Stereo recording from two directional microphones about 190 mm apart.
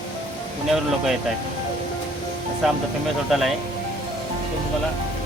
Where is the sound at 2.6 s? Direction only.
Centre (ahead or behind).